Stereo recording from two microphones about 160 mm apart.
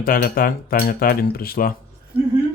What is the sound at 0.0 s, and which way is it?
Speech, 65° left (ahead or behind).